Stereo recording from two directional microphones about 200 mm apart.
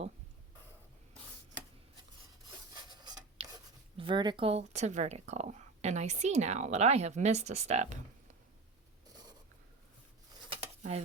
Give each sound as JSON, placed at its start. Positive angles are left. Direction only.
{"t": 3.0, "sound": "writing", "side_deg": -20}
{"t": 3.9, "sound": "speech", "side_deg": -25}
{"t": 9.0, "sound": "writing", "side_deg": -20}
{"t": 10.5, "sound": "a sound", "side_deg": -30}